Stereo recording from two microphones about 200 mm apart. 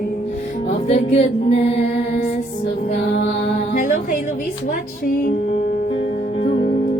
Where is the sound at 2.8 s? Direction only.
40° left (ahead or behind).